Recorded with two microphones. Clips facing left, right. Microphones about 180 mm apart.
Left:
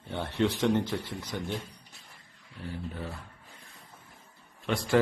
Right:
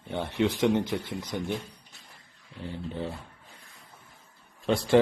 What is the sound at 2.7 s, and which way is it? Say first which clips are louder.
Speech: right 4 dB; 25° right (ahead or behind).